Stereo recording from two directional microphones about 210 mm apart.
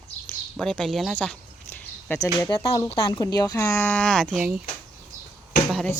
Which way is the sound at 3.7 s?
5° left (ahead or behind).